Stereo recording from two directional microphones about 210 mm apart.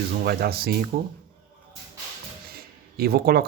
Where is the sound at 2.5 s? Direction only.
45° right (ahead or behind).